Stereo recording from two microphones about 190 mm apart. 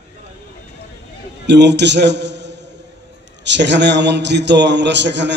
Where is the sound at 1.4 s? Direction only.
65° right (ahead or behind).